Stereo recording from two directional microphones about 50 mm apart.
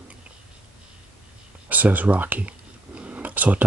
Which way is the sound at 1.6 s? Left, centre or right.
Right.